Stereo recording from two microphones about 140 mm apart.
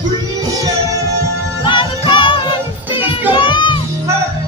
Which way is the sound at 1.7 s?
35° left (ahead or behind).